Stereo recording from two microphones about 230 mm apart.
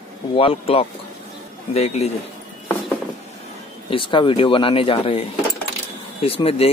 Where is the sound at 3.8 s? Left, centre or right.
Left.